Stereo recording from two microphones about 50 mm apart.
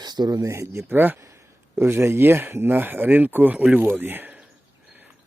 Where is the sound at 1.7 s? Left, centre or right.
Right.